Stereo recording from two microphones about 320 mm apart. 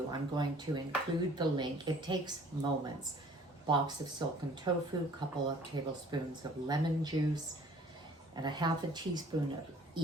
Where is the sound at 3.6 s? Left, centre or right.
Centre.